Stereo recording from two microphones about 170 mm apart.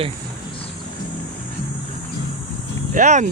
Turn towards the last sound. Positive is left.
turn(degrees=-45)  # may be behind; listen again after turning